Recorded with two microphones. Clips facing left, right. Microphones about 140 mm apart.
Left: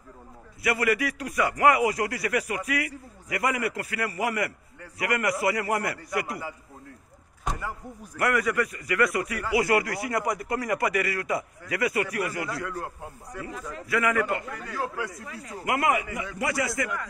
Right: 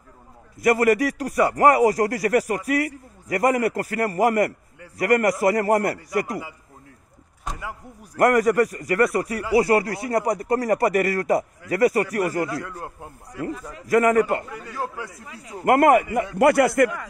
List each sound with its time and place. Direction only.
0.6 s a man's voice: 45° right (ahead or behind)
8.2 s a man's voice: 45° right (ahead or behind)
13.8 s a man's voice: 40° right (ahead or behind)
15.0 s speech: 15° right (ahead or behind)
15.6 s a man's voice: 55° right (ahead or behind)